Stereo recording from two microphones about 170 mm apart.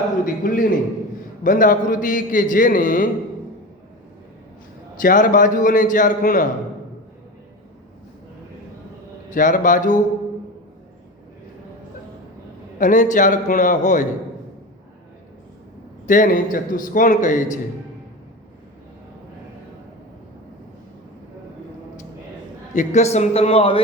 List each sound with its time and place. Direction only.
0.3 s a man's voice: 55° left (ahead or behind)
4.9 s a man's voice: 55° left (ahead or behind)
9.3 s a man's voice: 50° left (ahead or behind)
12.8 s a man's voice: 50° left (ahead or behind)
16.0 s a man's voice: 50° left (ahead or behind)
22.7 s a man's voice: 45° left (ahead or behind)